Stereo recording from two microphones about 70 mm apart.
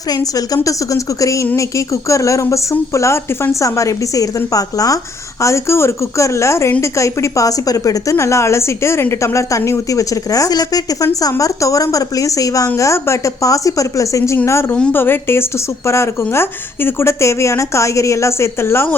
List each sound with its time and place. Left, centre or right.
0.1 s a woman's voice: left
5.4 s a woman's voice: left
8.2 s a woman's voice: left
14.4 s a woman's voice: left